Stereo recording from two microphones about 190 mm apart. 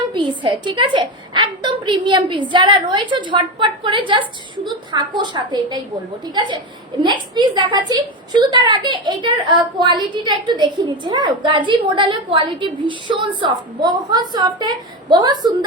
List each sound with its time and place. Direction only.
0.1 s a woman's voice: 25° right (ahead or behind)